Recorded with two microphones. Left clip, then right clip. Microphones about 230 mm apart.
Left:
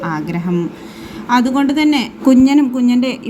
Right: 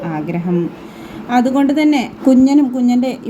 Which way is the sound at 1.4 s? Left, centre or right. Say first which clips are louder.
Right 1 dB; centre.